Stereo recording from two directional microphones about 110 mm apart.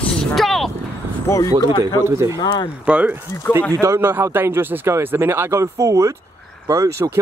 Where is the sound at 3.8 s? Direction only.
25° right (ahead or behind).